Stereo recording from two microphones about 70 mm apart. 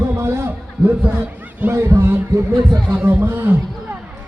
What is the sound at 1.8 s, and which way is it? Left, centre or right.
Speech, right.